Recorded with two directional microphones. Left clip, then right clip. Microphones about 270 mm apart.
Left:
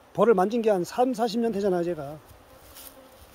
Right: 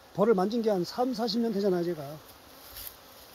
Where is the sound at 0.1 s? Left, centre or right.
Centre.